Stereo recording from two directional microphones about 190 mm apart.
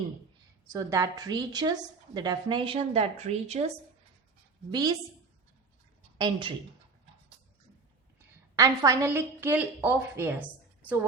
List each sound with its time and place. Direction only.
0.7 s a woman's voice: 15° right (ahead or behind); by 3.7 s 35° right (ahead or behind)
4.7 s a woman's voice: 20° right (ahead or behind)
6.1 s a woman's voice: 25° right (ahead or behind)
8.5 s a woman's voice: 15° right (ahead or behind)